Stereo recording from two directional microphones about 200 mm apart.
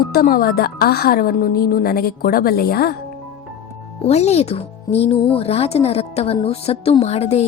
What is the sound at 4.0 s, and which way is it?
Speech, 30° left (ahead or behind).